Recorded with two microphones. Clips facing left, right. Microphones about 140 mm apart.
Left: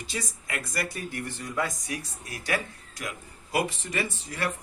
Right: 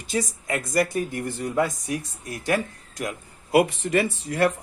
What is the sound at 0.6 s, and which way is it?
Speech, 45° right (ahead or behind).